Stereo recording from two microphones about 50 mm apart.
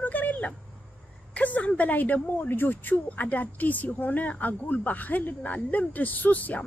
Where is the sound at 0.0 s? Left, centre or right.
Left.